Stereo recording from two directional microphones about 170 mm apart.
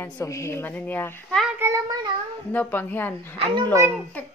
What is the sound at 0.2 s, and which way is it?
A woman's voice, 15° left (ahead or behind).